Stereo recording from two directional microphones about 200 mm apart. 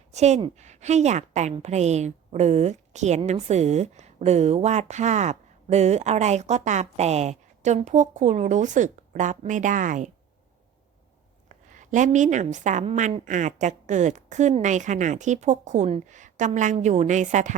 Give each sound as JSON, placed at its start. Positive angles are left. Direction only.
{"t": 0.1, "sound": "a woman's voice", "side_deg": -35}
{"t": 11.4, "sound": "a woman's voice", "side_deg": -40}